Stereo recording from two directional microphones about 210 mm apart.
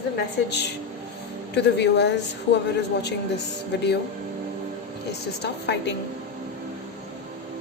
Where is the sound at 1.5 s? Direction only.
55° left (ahead or behind).